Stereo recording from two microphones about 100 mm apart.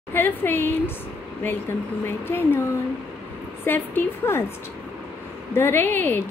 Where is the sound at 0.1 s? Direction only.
20° left (ahead or behind).